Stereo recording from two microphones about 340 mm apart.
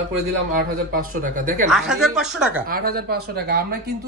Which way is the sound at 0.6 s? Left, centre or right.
Right.